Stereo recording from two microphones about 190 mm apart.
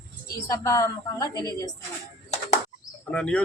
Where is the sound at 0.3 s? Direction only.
20° left (ahead or behind).